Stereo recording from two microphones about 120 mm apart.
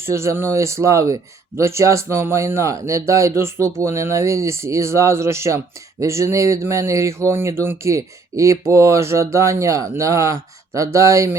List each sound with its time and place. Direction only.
0.0 s speech: 20° right (ahead or behind)